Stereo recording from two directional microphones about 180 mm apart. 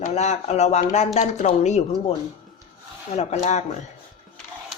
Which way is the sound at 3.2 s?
40° left (ahead or behind).